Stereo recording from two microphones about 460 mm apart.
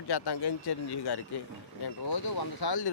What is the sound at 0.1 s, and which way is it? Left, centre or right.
Speech, left.